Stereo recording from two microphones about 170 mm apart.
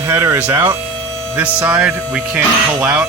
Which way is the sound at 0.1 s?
15° right (ahead or behind).